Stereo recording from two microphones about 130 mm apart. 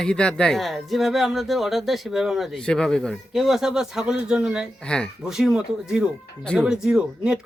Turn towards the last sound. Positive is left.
turn(degrees=-5)  # may be behind; listen again after turning